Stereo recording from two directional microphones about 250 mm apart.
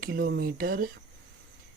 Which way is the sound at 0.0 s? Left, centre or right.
Right.